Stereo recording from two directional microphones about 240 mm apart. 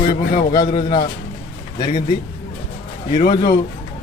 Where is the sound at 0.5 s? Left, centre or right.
Centre.